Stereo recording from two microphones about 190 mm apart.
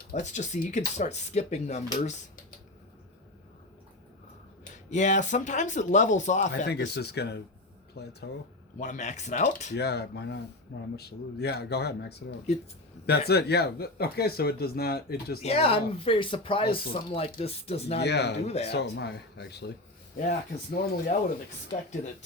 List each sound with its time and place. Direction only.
0.1 s speech: 40° left (ahead or behind)
4.9 s speech: 40° left (ahead or behind)
6.7 s speech: 60° left (ahead or behind)
8.8 s speech: 40° left (ahead or behind)
9.7 s speech: 60° left (ahead or behind)
15.4 s speech: 35° left (ahead or behind)
18.0 s speech: 60° left (ahead or behind)
18.4 s speech: 35° left (ahead or behind)
18.7 s speech: 65° left (ahead or behind)